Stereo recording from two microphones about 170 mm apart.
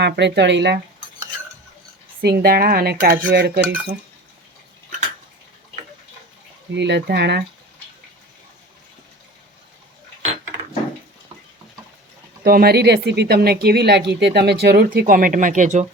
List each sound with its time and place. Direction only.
0.0 s speech: 85° right
2.2 s cutlery: 65° right (ahead or behind)
6.7 s speech: 90° right
12.4 s speech: 65° right (ahead or behind); by 15.9 s 45° right (ahead or behind)